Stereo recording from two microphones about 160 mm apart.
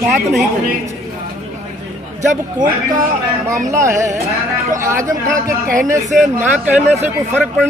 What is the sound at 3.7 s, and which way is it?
Speech, 15° right (ahead or behind).